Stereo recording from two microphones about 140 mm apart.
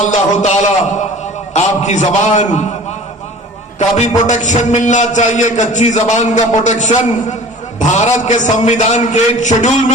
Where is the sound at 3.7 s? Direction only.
55° left (ahead or behind).